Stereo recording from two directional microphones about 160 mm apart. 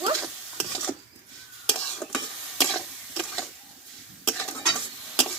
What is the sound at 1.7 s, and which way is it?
Stir, 5° left (ahead or behind).